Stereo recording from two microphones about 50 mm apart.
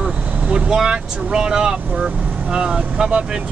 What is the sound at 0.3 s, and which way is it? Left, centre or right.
Speech, centre.